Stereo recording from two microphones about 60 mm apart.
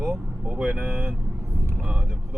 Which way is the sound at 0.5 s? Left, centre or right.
Right.